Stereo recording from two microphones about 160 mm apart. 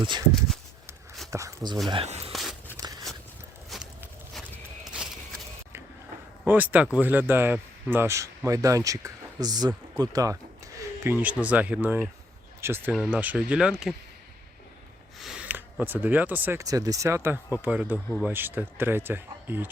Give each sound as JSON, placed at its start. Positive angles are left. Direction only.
{"t": 0.0, "sound": "speech", "side_deg": -30}
{"t": 1.3, "sound": "speech", "side_deg": -20}
{"t": 1.9, "sound": "speech", "side_deg": -40}
{"t": 2.3, "sound": "walk", "side_deg": 0}
{"t": 2.8, "sound": "a sound", "side_deg": -20}
{"t": 3.7, "sound": "a sound", "side_deg": -5}
{"t": 6.4, "sound": "speech", "side_deg": -10}
{"t": 11.0, "sound": "speech", "side_deg": -10}
{"t": 12.9, "sound": "speech", "side_deg": 0}
{"t": 15.2, "sound": "speech", "side_deg": -5}